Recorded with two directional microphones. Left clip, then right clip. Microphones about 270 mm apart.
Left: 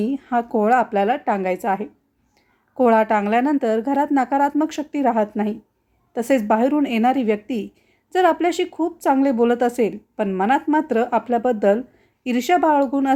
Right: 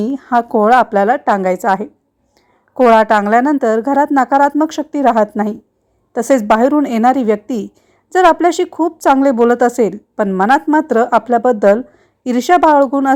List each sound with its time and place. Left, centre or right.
0.0 s a woman's voice: right